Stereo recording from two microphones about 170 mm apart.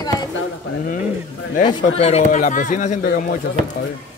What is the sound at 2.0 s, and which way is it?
Speech, 40° left (ahead or behind).